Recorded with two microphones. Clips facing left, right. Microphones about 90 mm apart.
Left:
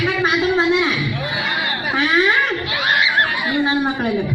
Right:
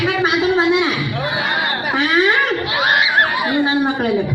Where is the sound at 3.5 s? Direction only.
15° right (ahead or behind).